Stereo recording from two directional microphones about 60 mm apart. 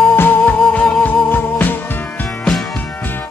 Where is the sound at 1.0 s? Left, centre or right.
Left.